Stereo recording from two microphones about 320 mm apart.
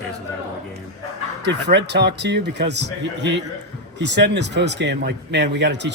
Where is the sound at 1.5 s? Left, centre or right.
Right.